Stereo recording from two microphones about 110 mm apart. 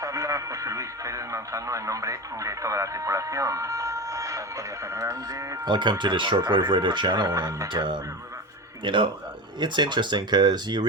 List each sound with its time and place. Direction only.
0.0 s speech: 30° right (ahead or behind)
7.7 s speech: 45° right (ahead or behind)